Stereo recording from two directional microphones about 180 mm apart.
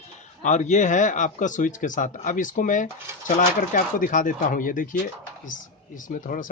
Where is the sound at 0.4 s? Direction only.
40° left (ahead or behind).